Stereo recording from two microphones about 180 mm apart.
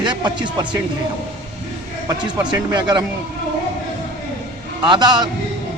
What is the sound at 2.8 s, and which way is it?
Speech, 25° right (ahead or behind).